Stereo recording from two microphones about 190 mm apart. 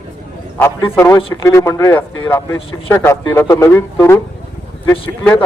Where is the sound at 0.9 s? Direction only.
15° left (ahead or behind).